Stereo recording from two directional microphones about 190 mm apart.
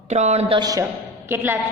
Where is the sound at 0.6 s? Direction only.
20° right (ahead or behind).